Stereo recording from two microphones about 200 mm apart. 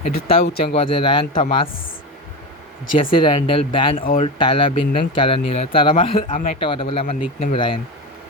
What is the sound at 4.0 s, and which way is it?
Speech, 45° left (ahead or behind).